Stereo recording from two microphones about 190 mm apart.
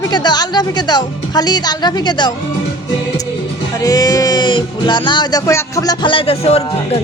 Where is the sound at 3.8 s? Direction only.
20° left (ahead or behind).